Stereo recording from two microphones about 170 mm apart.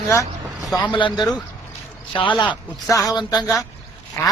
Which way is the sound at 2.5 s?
20° left (ahead or behind).